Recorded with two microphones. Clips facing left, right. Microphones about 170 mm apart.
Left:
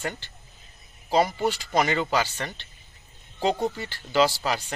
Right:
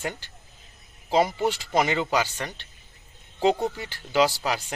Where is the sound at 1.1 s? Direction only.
20° right (ahead or behind).